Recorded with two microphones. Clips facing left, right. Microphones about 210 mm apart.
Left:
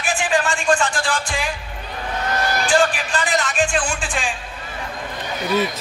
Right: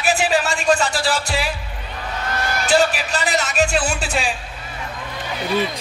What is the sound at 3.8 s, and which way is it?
Music, 40° right (ahead or behind).